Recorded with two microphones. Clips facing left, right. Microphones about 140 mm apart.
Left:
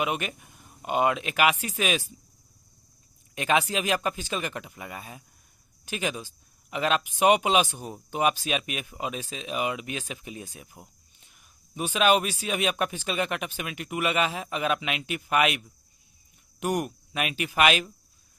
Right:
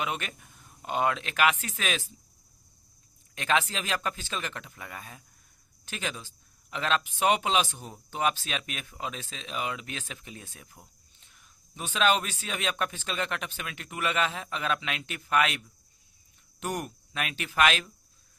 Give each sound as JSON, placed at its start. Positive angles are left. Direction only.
{"t": 0.0, "sound": "speech", "side_deg": 15}
{"t": 3.3, "sound": "speech", "side_deg": 10}